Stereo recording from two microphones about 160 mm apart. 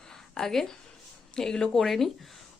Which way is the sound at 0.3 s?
5° left (ahead or behind).